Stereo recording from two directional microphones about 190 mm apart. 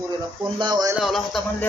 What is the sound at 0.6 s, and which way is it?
Speech, 20° right (ahead or behind).